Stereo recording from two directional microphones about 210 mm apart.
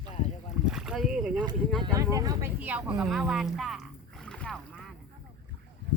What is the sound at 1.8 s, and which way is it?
Speech, 15° right (ahead or behind).